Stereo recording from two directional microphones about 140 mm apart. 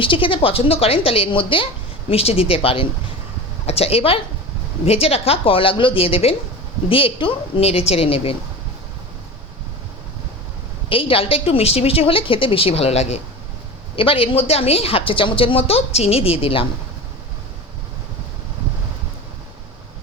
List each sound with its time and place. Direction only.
0.0 s a woman's voice: 40° left (ahead or behind)
10.8 s a woman's voice: 40° left (ahead or behind)